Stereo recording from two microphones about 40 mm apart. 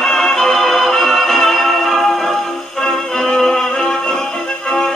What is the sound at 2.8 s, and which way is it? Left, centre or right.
Music, centre.